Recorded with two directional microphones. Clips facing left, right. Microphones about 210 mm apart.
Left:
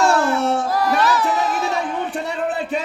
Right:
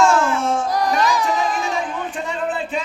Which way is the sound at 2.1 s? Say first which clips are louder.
Left 1 dB; 40° left (ahead or behind).